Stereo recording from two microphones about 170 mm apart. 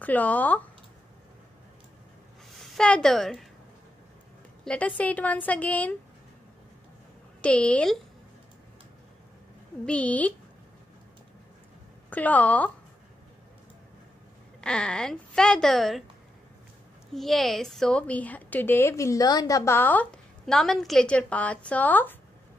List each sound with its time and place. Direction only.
0.0 s a woman's voice: 10° left (ahead or behind)
2.5 s a woman's voice: centre (ahead or behind)
4.6 s a woman's voice: 10° left (ahead or behind)
7.4 s a woman's voice: 5° left (ahead or behind)
9.8 s a woman's voice: 5° left (ahead or behind)
12.1 s a woman's voice: 10° left (ahead or behind)
14.6 s a woman's voice: 5° left (ahead or behind)
17.1 s a woman's voice: centre (ahead or behind)